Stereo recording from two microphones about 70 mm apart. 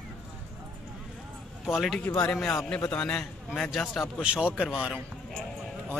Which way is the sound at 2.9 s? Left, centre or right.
Centre.